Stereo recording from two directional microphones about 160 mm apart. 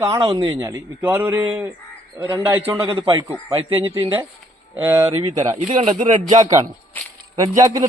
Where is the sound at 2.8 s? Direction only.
35° right (ahead or behind).